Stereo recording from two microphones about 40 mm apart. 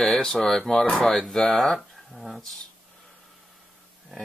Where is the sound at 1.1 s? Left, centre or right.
Centre.